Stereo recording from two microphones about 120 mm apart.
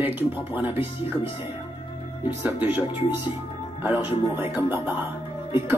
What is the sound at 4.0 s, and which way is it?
Speech, 15° right (ahead or behind).